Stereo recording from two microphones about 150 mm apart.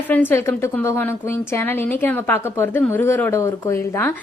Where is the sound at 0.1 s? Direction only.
15° left (ahead or behind).